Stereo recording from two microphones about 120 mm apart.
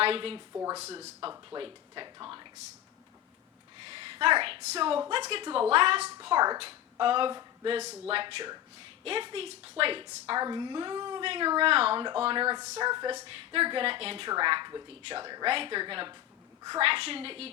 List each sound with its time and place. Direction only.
0.0 s speech: 50° right (ahead or behind)
0.5 s speech: 25° right (ahead or behind)
1.5 s speech: 45° right (ahead or behind)
2.2 s a sound: 40° right (ahead or behind)
3.8 s a sound: 50° right (ahead or behind)
4.7 s a woman's voice: 50° right (ahead or behind)
6.2 s speech: 40° right (ahead or behind)
7.8 s a woman's voice: 60° right (ahead or behind)
10.2 s speech: 35° right (ahead or behind)
11.7 s a woman's voice: 55° right (ahead or behind); by 13.1 s 35° right (ahead or behind)
13.2 s a woman's voice: 50° right (ahead or behind)
15.4 s a woman's voice: 50° right (ahead or behind)